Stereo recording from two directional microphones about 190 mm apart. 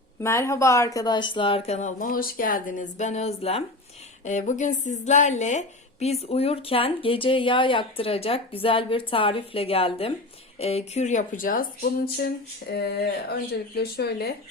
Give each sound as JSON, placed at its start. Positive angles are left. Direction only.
{"t": 0.2, "sound": "a woman's voice", "side_deg": 15}